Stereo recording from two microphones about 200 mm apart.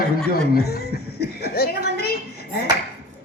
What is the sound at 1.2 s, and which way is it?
Chuckle, 50° left (ahead or behind).